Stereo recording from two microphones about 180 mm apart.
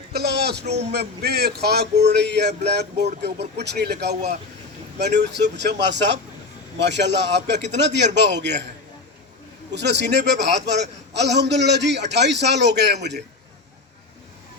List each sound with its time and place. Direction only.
0.1 s a sound: 65° right (ahead or behind)
0.6 s a man's voice: 35° right (ahead or behind)
0.9 s a man's voice: 65° right (ahead or behind)
4.1 s a man's voice: 40° right (ahead or behind)
4.9 s a man's voice: 70° right (ahead or behind)
9.7 s a man's voice: 70° right (ahead or behind)